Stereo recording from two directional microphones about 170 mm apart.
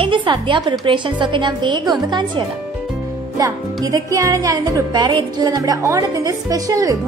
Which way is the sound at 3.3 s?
20° right (ahead or behind).